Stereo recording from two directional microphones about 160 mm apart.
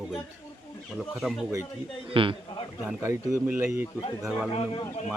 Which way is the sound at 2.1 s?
35° right (ahead or behind).